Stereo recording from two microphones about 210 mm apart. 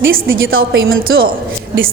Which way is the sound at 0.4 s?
70° right (ahead or behind).